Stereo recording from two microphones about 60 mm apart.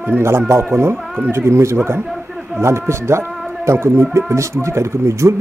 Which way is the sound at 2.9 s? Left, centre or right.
Right.